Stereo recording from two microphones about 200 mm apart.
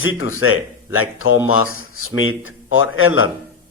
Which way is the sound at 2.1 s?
80° left.